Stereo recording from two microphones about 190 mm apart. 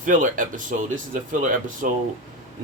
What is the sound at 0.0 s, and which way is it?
Speech, 45° right (ahead or behind).